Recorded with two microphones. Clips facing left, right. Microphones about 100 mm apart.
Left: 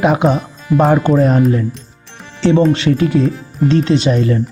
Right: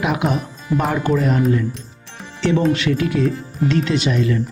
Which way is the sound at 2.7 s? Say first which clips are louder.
Left 5 dB; 30° left (ahead or behind).